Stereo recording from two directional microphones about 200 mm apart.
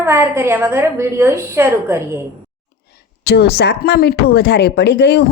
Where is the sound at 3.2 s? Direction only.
55° left (ahead or behind).